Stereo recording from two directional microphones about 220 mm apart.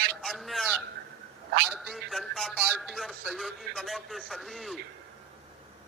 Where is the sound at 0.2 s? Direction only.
Centre (ahead or behind).